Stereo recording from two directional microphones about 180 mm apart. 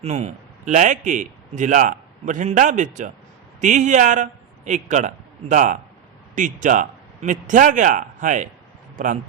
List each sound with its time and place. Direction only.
0.0 s a man's voice: 40° right (ahead or behind)